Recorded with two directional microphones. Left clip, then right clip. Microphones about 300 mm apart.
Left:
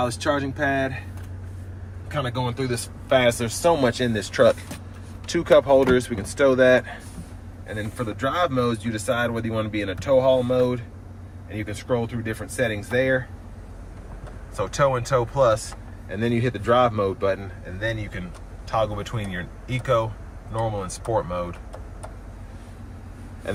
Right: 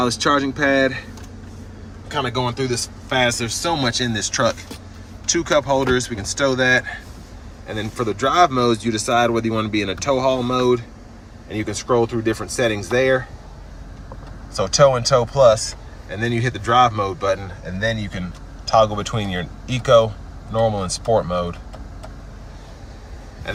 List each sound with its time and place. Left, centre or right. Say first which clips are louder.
0.1 s speech: right 6 dB; centre
2.6 s speech: right 5 dB; centre
7.7 s speech: right 6 dB; centre
14.5 s speech: right 7 dB; centre